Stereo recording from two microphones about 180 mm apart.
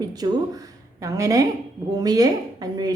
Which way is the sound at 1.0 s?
15° right (ahead or behind).